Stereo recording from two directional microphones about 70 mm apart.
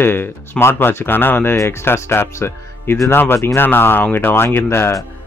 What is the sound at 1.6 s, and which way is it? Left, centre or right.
Speech, left.